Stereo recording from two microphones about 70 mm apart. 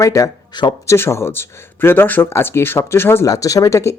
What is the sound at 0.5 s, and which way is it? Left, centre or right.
Speech, left.